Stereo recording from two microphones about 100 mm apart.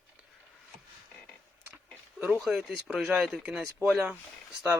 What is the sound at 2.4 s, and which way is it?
Speech, centre (ahead or behind).